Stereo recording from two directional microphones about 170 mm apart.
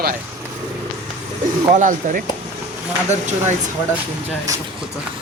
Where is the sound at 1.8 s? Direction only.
50° right (ahead or behind).